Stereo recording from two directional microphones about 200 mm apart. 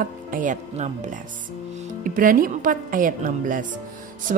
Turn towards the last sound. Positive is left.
turn(degrees=-40)  # may be behind; listen again after turning